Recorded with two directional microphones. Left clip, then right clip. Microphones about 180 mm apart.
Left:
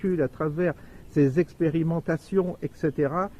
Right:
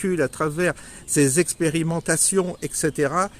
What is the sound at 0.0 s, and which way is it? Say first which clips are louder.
Speech: right 4 dB; 20° right (ahead or behind).